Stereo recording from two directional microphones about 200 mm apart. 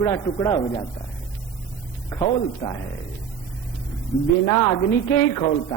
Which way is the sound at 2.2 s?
30° left (ahead or behind).